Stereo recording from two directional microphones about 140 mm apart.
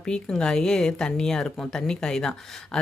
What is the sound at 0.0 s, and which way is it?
Speech, 5° left (ahead or behind).